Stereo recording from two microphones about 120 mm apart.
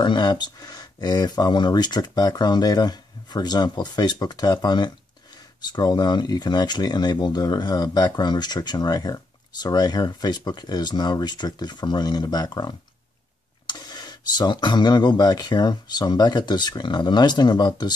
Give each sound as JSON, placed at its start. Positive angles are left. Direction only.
{"t": 0.0, "sound": "speech", "side_deg": 40}